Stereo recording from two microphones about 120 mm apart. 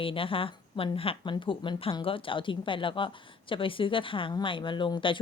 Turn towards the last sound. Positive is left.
turn(degrees=45)  # may be behind; listen again after turning